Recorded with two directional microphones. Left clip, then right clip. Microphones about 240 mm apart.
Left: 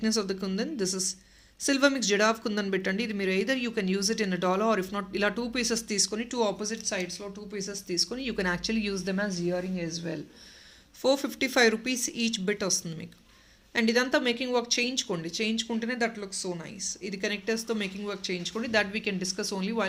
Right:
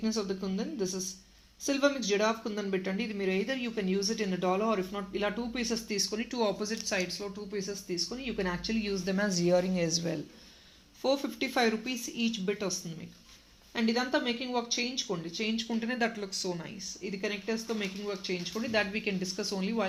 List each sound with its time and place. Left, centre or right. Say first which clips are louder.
0.0 s speech: left 4 dB; left; by 7.6 s centre
7.7 s speech: left 4 dB; left
9.1 s speech: right 7 dB; centre
11.0 s speech: left 4 dB; left
13.7 s speech: left 5 dB; left; by 16.6 s centre
17.0 s speech: left 2 dB; left